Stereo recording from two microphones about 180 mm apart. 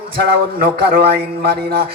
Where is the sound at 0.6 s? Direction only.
60° right (ahead or behind).